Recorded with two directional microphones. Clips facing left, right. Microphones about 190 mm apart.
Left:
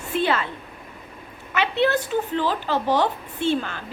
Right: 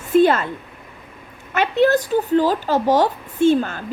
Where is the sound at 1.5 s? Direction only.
45° right (ahead or behind).